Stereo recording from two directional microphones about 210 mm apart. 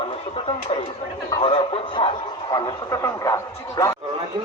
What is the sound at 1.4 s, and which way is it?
Speech, 25° left (ahead or behind).